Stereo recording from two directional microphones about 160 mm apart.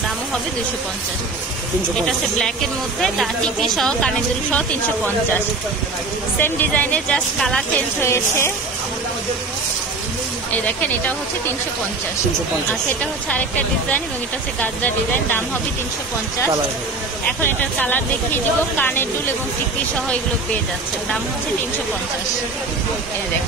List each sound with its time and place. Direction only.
2.0 s a woman's voice: centre (ahead or behind)
6.4 s speech: 10° left (ahead or behind)
8.0 s speech: 15° left (ahead or behind)
13.3 s speech: 10° left (ahead or behind)
17.4 s speech: 10° left (ahead or behind)